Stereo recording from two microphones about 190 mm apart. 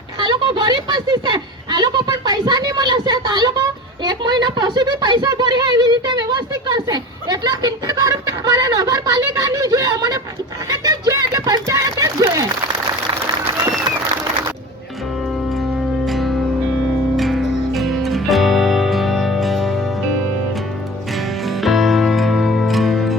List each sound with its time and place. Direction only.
0.2 s a sound: 25° right (ahead or behind)
16.0 s music: centre (ahead or behind)
21.4 s music: centre (ahead or behind)